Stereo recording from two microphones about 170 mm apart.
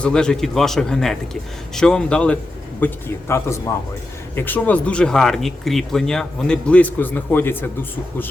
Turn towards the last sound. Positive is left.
turn(degrees=10)  # may be behind; listen again after turning